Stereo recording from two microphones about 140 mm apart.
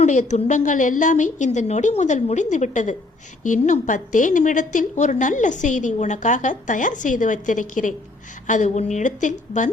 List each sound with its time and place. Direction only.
0.0 s a woman's voice: 60° left (ahead or behind)